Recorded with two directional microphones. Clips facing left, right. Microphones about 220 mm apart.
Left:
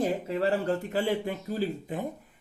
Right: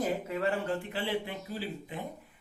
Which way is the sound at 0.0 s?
30° left (ahead or behind).